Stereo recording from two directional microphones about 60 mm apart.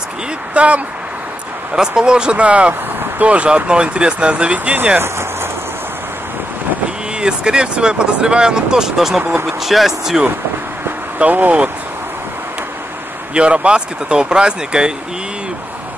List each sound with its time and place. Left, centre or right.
0.6 s speech: right
7.2 s speech: centre
9.2 s speech: right
9.5 s speech: centre
11.1 s speech: right
13.3 s speech: centre